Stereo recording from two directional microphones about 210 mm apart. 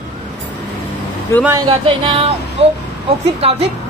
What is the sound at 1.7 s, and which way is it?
Music, 30° right (ahead or behind).